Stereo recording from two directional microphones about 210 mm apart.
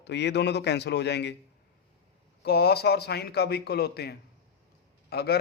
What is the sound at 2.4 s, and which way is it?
A man's voice, 50° left (ahead or behind).